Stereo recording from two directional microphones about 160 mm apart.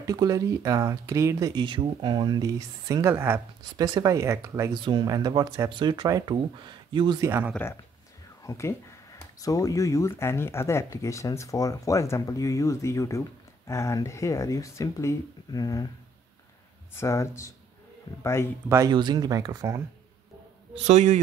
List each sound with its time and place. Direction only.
0.0 s speech: 20° right (ahead or behind)
4.7 s speech: 30° right (ahead or behind)
7.2 s speech: 15° right (ahead or behind)
8.5 s speech: 20° left (ahead or behind)
16.9 s speech: 20° left (ahead or behind)
18.7 s speech: 25° right (ahead or behind)
20.7 s a man's voice: 45° right (ahead or behind)